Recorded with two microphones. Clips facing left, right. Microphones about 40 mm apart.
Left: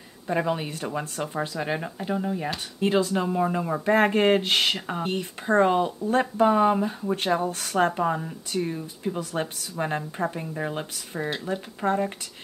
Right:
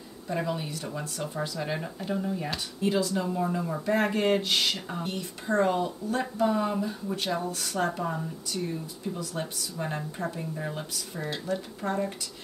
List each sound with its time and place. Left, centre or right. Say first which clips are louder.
0.3 s speech: left 5 dB; left
2.8 s speech: left 4 dB; left